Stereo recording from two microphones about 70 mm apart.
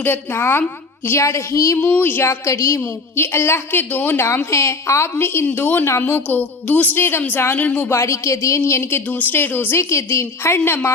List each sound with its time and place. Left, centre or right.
0.0 s a woman's voice: left
1.8 s a woman's voice: left
2.4 s a woman's voice: left
4.5 s a woman's voice: left
7.9 s a woman's voice: left